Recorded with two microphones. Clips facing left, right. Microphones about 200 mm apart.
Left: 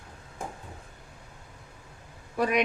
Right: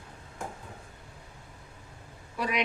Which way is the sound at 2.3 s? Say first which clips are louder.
Left 6 dB; 50° left (ahead or behind).